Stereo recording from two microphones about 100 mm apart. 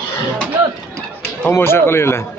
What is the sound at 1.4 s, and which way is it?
Speech, 25° left (ahead or behind).